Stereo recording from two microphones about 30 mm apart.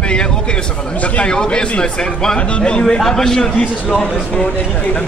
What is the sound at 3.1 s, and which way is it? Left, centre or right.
Speech, centre.